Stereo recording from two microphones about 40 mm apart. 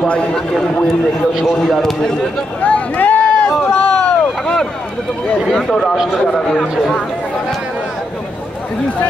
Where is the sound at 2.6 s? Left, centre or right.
Left.